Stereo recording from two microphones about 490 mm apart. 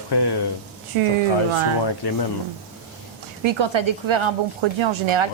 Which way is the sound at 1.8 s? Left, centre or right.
Left.